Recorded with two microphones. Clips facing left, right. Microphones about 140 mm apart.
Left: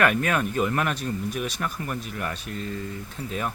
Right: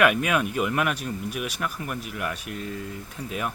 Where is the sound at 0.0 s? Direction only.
10° right (ahead or behind).